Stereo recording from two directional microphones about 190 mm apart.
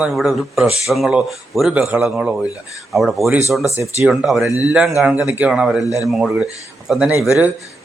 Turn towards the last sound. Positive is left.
turn(degrees=-5)  # may be behind; listen again after turning